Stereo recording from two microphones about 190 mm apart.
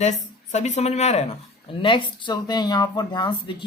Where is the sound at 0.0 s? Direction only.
35° left (ahead or behind).